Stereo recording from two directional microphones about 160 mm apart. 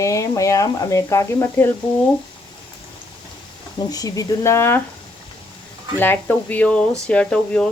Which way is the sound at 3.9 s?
20° left (ahead or behind).